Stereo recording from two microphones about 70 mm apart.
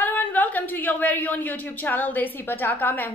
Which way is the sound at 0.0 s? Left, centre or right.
Left.